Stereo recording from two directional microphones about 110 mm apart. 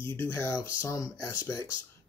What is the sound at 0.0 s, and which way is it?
Speech, 25° left (ahead or behind).